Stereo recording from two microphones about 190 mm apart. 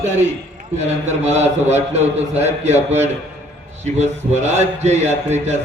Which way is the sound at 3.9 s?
35° right (ahead or behind).